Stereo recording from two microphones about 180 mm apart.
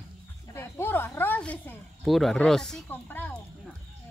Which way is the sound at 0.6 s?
10° left (ahead or behind).